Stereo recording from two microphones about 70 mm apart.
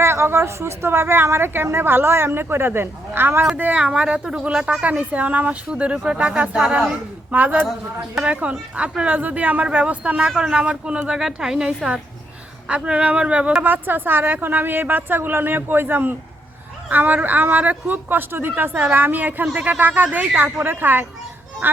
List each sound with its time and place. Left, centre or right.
0.0 s a woman's voice: right
3.5 s a woman's voice: centre
13.7 s speech: right